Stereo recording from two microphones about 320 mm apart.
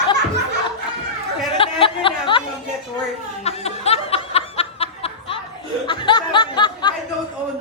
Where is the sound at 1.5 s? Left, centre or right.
Centre.